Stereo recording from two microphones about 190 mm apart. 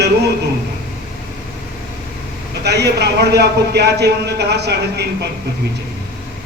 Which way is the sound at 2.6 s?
60° right (ahead or behind).